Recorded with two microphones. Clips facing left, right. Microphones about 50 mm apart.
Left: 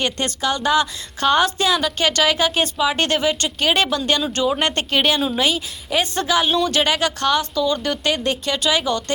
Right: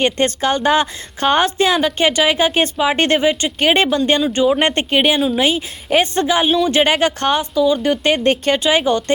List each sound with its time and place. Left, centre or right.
0.0 s speech: right
6.2 s speech: right
7.5 s speech: centre
8.0 s speech: right